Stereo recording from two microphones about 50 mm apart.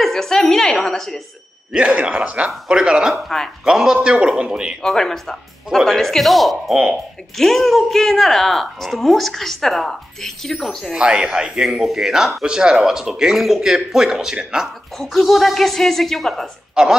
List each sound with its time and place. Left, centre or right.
0.0 s speech: centre
1.7 s a man's voice: right
3.3 s speech: centre
3.6 s speech: centre
4.8 s a woman's voice: centre
10.9 s speech: centre
11.7 s a woman's voice: centre
15.0 s a woman's voice: centre
16.8 s speech: centre